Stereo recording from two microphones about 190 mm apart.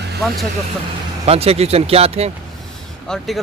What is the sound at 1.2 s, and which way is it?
Speech, 30° right (ahead or behind).